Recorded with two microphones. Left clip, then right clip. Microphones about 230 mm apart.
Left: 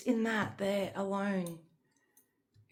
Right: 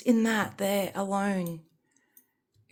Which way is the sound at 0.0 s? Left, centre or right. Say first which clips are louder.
Right 6 dB; right.